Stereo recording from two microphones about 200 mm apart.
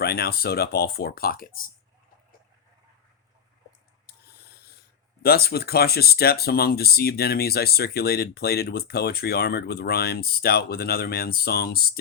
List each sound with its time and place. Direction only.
0.0 s speech: 50° left (ahead or behind)
5.2 s speech: 50° left (ahead or behind)